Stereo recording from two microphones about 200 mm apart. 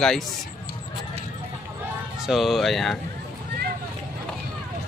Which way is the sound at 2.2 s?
Centre (ahead or behind).